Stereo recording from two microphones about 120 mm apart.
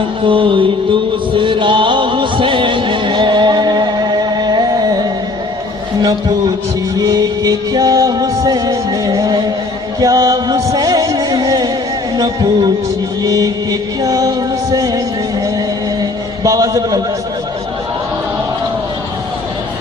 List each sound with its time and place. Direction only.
0.2 s mantra: 45° right (ahead or behind)
1.3 s music: 45° right (ahead or behind)
13.2 s chant: 30° right (ahead or behind)
15.5 s a sound: 30° right (ahead or behind)